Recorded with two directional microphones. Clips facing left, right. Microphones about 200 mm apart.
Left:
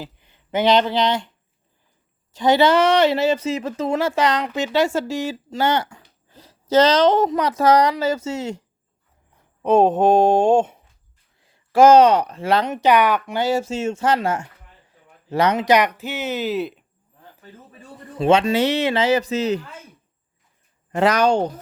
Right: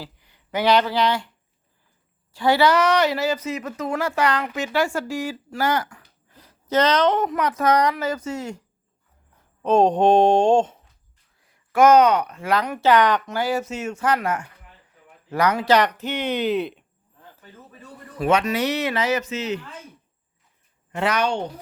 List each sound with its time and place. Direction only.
0.0 s speech: 20° left (ahead or behind)
2.3 s speech: 20° left (ahead or behind)
9.6 s a sound: 5° left (ahead or behind)
11.3 s speech: 25° left (ahead or behind); by 13.3 s 10° left (ahead or behind)
13.3 s speech: 25° left (ahead or behind); by 16.8 s 5° left (ahead or behind)
17.7 s speech: 30° left (ahead or behind)
20.9 s speech: 40° left (ahead or behind)